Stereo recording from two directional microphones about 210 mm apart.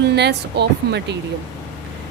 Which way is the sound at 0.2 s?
50° right (ahead or behind).